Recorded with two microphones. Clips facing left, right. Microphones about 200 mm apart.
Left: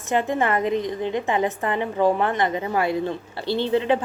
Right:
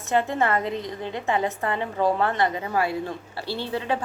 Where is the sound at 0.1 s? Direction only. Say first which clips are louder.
Left 1 dB; 15° left (ahead or behind).